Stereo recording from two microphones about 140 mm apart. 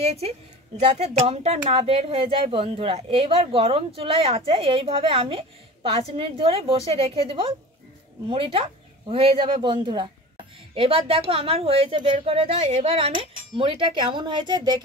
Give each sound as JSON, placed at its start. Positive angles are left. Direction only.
{"t": 0.0, "sound": "speech", "side_deg": -50}